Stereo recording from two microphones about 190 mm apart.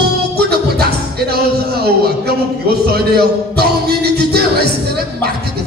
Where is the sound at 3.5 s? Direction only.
55° right (ahead or behind).